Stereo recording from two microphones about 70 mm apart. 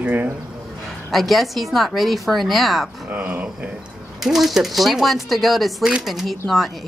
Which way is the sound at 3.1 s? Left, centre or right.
Right.